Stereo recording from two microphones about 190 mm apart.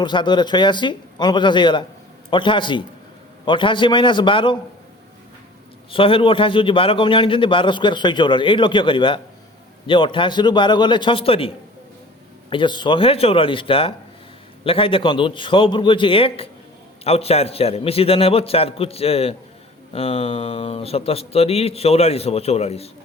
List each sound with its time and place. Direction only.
0.0 s a man's voice: 25° left (ahead or behind)
5.9 s a man's voice: 30° left (ahead or behind)